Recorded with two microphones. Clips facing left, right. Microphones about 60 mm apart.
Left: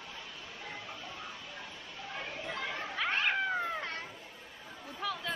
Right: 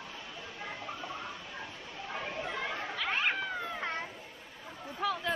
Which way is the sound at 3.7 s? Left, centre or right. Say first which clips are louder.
Right 2 dB; centre.